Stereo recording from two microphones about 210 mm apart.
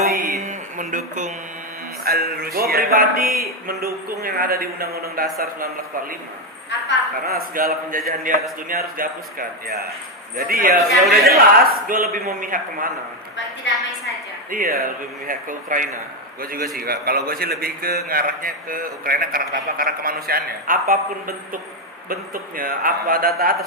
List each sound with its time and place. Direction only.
0.1 s a sound: 40° right (ahead or behind)
2.0 s a man's voice: 45° right (ahead or behind)
7.3 s a man's voice: 45° right (ahead or behind)
13.7 s a woman's voice: 60° left (ahead or behind)
14.5 s a man's voice: 45° right (ahead or behind)